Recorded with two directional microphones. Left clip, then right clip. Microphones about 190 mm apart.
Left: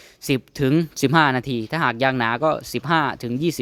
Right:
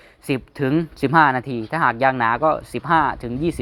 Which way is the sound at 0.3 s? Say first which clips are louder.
Left 1 dB; 35° left (ahead or behind).